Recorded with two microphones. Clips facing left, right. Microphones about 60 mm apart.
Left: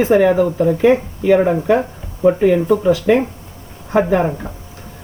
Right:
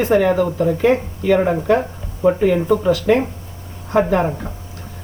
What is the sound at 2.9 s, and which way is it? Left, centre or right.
Speech, centre.